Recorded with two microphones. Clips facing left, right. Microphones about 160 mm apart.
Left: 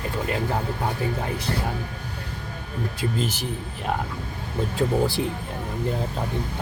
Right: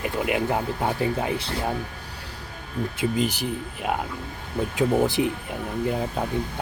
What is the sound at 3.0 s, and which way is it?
Speech, 15° right (ahead or behind).